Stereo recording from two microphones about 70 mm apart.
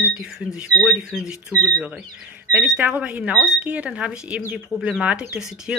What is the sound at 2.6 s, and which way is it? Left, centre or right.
Speech, centre.